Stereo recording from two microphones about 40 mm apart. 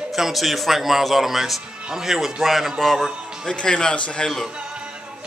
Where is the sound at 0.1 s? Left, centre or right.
Centre.